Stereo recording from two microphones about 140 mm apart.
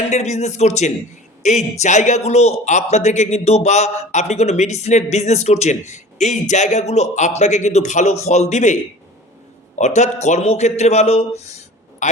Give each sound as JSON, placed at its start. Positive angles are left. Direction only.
{"t": 0.1, "sound": "a man's voice", "side_deg": 55}